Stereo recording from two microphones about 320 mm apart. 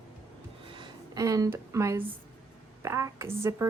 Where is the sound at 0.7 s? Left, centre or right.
Centre.